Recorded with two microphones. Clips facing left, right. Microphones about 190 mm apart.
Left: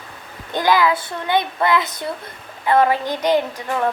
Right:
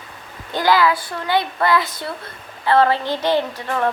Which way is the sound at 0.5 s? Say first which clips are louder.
Even; 20° left (ahead or behind).